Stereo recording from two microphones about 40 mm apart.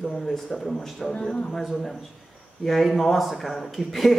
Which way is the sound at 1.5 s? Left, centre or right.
Centre.